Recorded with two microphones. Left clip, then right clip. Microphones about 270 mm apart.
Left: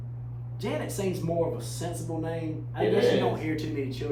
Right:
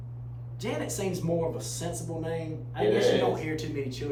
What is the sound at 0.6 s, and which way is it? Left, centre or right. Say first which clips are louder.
Speech: left 1 dB; centre.